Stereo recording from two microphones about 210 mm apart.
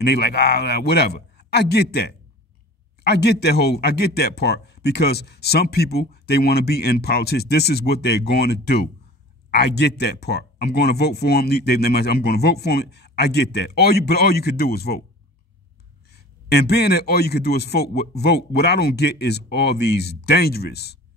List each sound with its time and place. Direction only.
0.0 s a man's voice: 50° left (ahead or behind)
16.1 s a man's voice: 50° left (ahead or behind)